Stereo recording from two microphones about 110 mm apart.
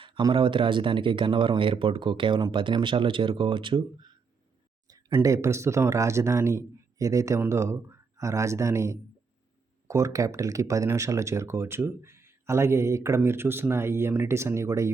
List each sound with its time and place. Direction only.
0.2 s speech: 45° right (ahead or behind)
4.9 s a sound: 35° right (ahead or behind)
5.3 s speech: 25° right (ahead or behind)